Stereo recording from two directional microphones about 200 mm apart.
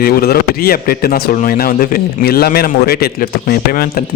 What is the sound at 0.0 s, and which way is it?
Speech, 50° left (ahead or behind).